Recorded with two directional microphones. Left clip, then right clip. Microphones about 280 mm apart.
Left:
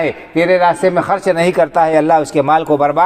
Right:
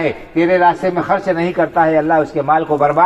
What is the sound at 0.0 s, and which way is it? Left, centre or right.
A man's voice, left.